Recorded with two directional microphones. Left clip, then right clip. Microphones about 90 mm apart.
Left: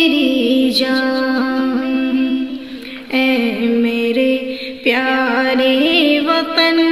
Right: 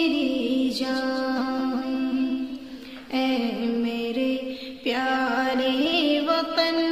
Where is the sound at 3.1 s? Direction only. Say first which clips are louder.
Left 10 dB; 15° left (ahead or behind).